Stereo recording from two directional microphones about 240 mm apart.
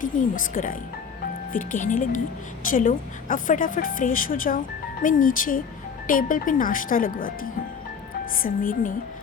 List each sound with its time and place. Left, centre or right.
0.0 s a woman's voice: left